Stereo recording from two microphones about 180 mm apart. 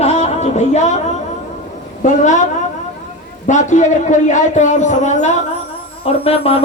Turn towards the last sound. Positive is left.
turn(degrees=35)  # may be behind; listen again after turning